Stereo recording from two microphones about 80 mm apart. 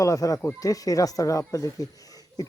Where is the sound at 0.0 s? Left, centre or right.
Left.